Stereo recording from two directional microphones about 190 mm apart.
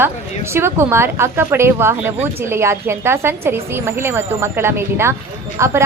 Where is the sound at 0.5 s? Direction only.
10° right (ahead or behind).